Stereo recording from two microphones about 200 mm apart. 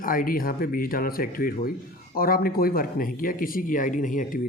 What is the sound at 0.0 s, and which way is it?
Speech, 45° left (ahead or behind).